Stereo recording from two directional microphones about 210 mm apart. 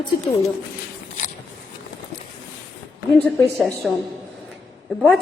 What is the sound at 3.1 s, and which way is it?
Speech, 5° left (ahead or behind).